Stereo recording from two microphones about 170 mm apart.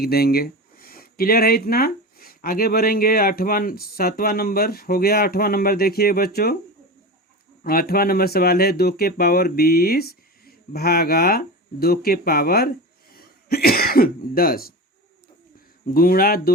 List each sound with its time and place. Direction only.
0.0 s speech: 65° left (ahead or behind)
7.6 s speech: 60° left (ahead or behind)
15.9 s speech: 60° left (ahead or behind)